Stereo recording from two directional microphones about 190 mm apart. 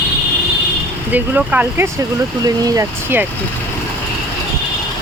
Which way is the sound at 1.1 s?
10° right (ahead or behind).